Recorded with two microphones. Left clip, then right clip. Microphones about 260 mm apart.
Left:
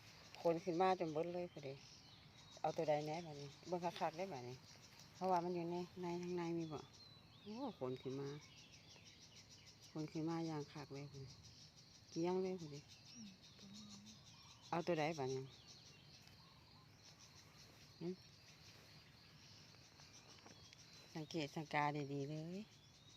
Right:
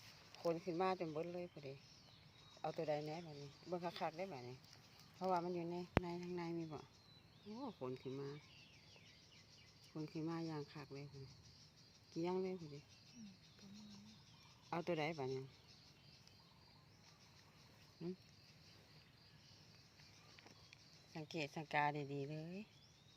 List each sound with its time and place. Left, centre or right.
0.4 s speech: centre
9.9 s speech: centre
12.1 s speech: centre
14.7 s speech: centre
21.1 s speech: centre